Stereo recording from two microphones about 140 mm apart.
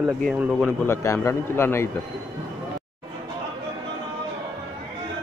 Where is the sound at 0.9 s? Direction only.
20° left (ahead or behind).